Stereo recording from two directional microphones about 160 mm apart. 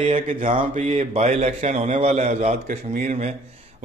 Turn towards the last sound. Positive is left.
turn(degrees=-50)  # may be behind; listen again after turning